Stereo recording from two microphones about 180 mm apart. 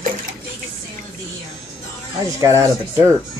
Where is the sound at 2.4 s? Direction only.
15° right (ahead or behind).